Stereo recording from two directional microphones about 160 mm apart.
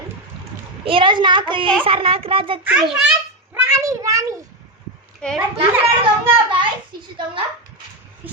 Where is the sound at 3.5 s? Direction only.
20° right (ahead or behind).